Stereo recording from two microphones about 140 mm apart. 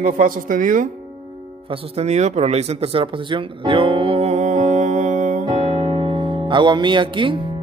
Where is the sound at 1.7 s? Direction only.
50° right (ahead or behind).